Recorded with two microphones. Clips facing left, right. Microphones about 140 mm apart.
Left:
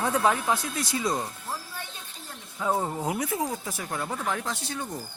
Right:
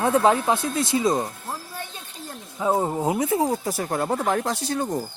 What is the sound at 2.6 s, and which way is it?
Speech, 25° right (ahead or behind).